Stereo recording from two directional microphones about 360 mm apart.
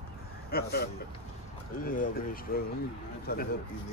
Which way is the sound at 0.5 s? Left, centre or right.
Left.